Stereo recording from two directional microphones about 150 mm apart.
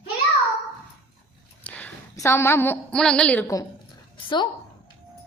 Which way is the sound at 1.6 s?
10° left (ahead or behind).